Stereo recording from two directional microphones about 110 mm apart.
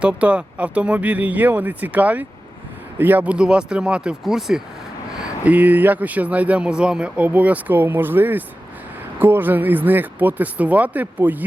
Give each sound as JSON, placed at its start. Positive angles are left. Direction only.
{"t": 0.0, "sound": "speech", "side_deg": -10}
{"t": 5.2, "sound": "speech", "side_deg": -15}